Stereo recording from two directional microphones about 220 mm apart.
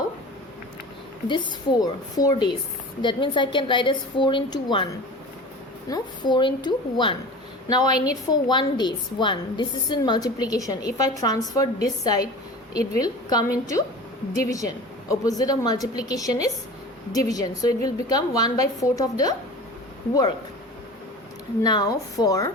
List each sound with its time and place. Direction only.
1.8 s a woman's voice: 15° left (ahead or behind)
5.9 s a woman's voice: 20° left (ahead or behind)
21.6 s a woman's voice: 20° left (ahead or behind)